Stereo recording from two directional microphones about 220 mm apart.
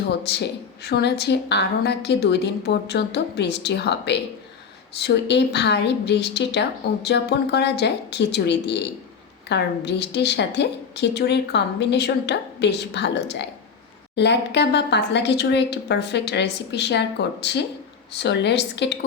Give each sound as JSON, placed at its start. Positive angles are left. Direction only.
{"t": 0.9, "sound": "a woman's voice", "side_deg": 50}